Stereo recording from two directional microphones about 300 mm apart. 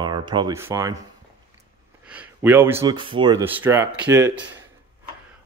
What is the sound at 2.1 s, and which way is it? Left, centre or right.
Speech, centre.